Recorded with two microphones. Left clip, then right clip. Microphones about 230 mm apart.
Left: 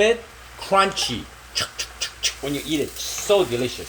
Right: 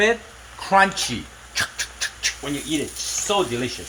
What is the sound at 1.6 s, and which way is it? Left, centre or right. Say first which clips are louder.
Pant: right 2 dB; right.